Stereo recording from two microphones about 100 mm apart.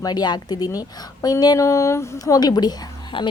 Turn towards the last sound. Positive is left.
turn(degrees=50)  # may be behind; listen again after turning